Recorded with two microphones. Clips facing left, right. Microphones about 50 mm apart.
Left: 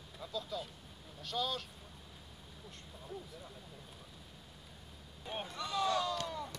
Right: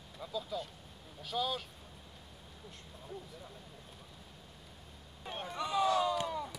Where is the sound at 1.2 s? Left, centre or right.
Centre.